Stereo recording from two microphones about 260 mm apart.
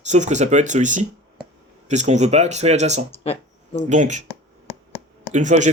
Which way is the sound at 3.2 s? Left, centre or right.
Left.